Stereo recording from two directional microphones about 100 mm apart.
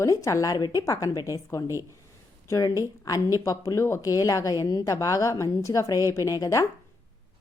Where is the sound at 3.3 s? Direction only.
35° left (ahead or behind).